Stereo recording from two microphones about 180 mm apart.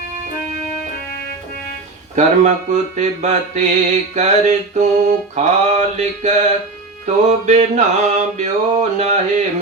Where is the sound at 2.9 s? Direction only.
40° right (ahead or behind).